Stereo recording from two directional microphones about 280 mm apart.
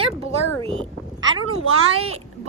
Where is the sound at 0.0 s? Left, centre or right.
Right.